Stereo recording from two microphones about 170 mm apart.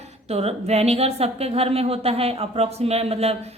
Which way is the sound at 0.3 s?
35° right (ahead or behind).